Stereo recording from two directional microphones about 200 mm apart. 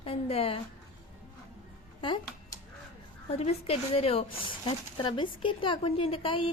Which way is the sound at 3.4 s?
30° left (ahead or behind).